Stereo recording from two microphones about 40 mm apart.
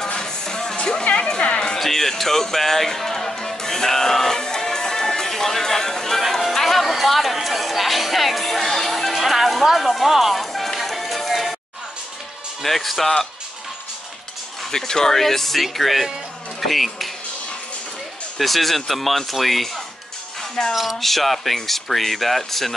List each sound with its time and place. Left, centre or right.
0.0 s music: centre
1.8 s music: centre
12.6 s speech: centre
14.7 s speech: centre
18.4 s speech: centre